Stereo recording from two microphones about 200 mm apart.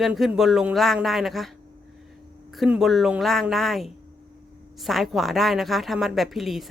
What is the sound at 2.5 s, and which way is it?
Speech, centre (ahead or behind).